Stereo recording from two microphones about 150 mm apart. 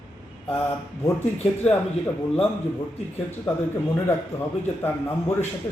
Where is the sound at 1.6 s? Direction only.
10° left (ahead or behind).